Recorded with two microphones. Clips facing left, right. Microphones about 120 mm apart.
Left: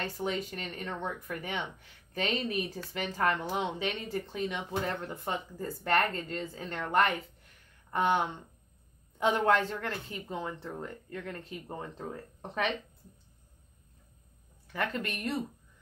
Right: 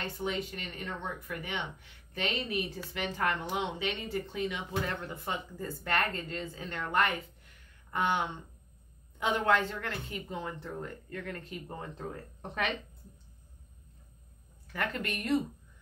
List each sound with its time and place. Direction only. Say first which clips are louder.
0.0 s speech: left 1 dB; 35° left (ahead or behind)
7.9 s speech: left 3 dB; 40° left (ahead or behind)
14.7 s speech: left 1 dB; 25° left (ahead or behind)